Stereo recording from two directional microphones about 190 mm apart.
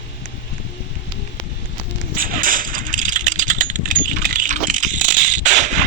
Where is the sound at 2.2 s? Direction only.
45° right (ahead or behind).